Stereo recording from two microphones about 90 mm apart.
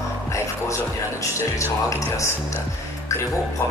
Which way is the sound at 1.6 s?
35° left (ahead or behind).